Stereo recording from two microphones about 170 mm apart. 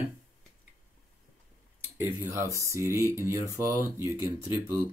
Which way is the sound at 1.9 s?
15° right (ahead or behind).